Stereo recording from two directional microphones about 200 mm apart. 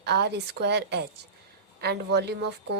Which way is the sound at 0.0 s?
55° right (ahead or behind).